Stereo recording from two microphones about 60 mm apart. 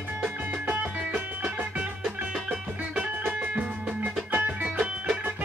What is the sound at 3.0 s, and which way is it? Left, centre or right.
Music, right.